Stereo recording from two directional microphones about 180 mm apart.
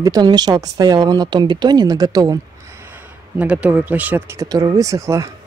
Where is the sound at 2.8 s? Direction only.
10° right (ahead or behind).